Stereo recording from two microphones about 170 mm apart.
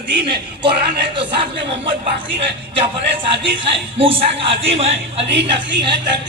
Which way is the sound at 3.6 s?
30° right (ahead or behind).